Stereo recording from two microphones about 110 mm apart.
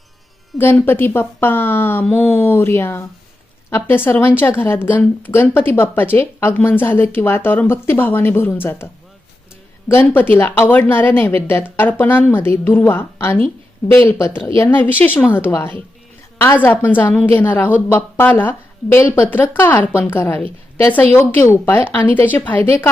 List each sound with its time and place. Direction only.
0.5 s music: centre (ahead or behind)
0.9 s speech: 20° left (ahead or behind)
9.9 s speech: 20° left (ahead or behind)